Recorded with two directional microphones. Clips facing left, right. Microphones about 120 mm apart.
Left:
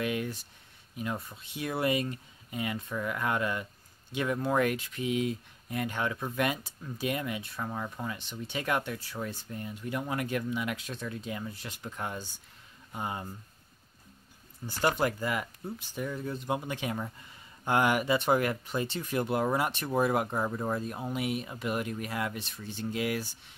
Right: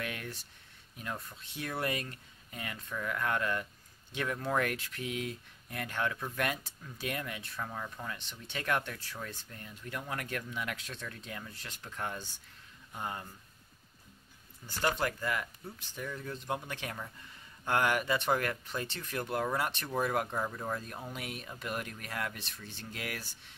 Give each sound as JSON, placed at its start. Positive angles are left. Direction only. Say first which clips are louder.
{"t": 0.0, "sound": "speech", "louder": "left 8 dB", "side_deg": 5}
{"t": 7.5, "sound": "speech", "louder": "left 4 dB", "side_deg": 20}
{"t": 14.6, "sound": "speech", "louder": "left 8 dB", "side_deg": 35}
{"t": 15.0, "sound": "speech", "louder": "left 4 dB", "side_deg": 20}
{"t": 21.0, "sound": "speech", "louder": "left 9 dB", "side_deg": 10}